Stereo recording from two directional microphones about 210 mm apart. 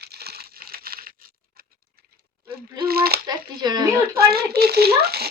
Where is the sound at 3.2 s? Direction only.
20° right (ahead or behind).